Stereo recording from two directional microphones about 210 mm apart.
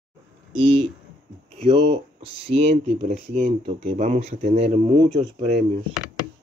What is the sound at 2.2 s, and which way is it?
Speech, 25° right (ahead or behind).